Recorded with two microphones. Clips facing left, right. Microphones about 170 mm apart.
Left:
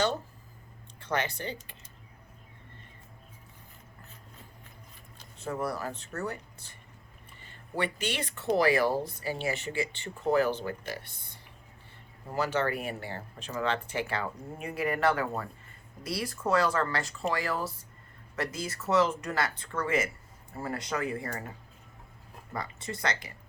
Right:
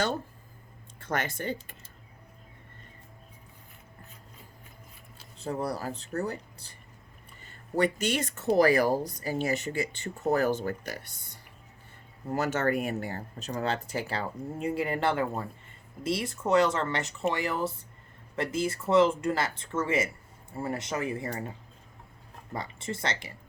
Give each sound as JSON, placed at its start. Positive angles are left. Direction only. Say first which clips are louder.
{"t": 1.0, "sound": "speech", "louder": "right 1 dB", "side_deg": -50}
{"t": 5.4, "sound": "speech", "louder": "right 1 dB", "side_deg": -35}
{"t": 7.9, "sound": "speech", "louder": "right 4 dB", "side_deg": -45}
{"t": 12.3, "sound": "speech", "louder": "right 2 dB", "side_deg": -45}
{"t": 22.5, "sound": "speech", "louder": "right 2 dB", "side_deg": -25}